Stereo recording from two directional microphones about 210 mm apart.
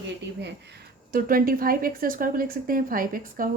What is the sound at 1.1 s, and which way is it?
A woman's voice, 40° right (ahead or behind).